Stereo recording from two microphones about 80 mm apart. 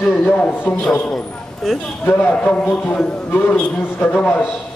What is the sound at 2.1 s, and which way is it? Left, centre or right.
Speech, left.